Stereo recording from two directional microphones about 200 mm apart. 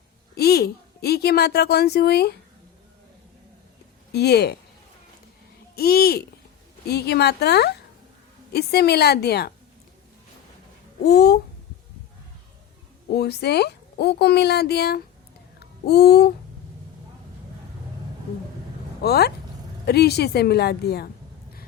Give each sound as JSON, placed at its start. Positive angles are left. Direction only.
{"t": 0.3, "sound": "a woman's voice", "side_deg": 50}
{"t": 4.1, "sound": "speech", "side_deg": 55}
{"t": 5.7, "sound": "a woman's voice", "side_deg": 50}
{"t": 11.0, "sound": "a woman's voice", "side_deg": 50}
{"t": 13.1, "sound": "speech", "side_deg": 55}
{"t": 19.0, "sound": "a woman's voice", "side_deg": 50}